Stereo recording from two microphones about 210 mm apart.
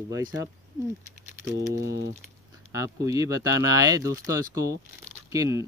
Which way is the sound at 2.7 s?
15° right (ahead or behind).